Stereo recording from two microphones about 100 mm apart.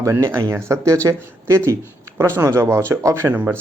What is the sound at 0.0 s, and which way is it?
Speech, 25° right (ahead or behind).